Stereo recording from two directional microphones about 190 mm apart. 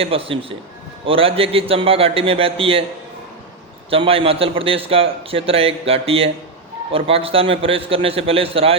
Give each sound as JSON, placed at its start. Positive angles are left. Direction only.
{"t": 0.0, "sound": "a man's voice", "side_deg": -30}
{"t": 3.8, "sound": "a man's voice", "side_deg": -30}